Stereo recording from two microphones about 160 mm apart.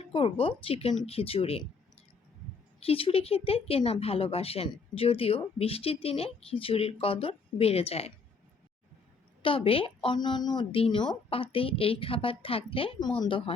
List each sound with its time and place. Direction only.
0.0 s speech: 35° left (ahead or behind)
2.8 s speech: 35° left (ahead or behind)
9.4 s speech: 35° left (ahead or behind)